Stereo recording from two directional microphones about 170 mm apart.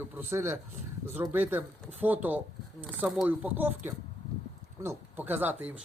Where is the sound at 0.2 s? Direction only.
15° right (ahead or behind).